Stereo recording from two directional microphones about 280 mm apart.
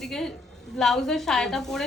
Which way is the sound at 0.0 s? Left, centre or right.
Centre.